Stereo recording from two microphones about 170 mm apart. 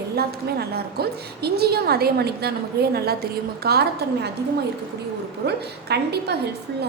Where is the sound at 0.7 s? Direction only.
65° right (ahead or behind).